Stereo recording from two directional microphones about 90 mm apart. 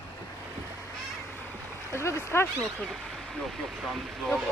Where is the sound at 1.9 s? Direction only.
30° left (ahead or behind).